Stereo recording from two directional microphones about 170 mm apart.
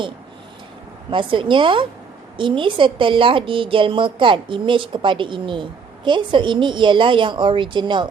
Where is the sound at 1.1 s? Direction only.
30° right (ahead or behind).